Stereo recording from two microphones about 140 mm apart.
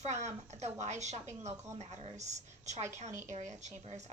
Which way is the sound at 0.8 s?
55° right (ahead or behind).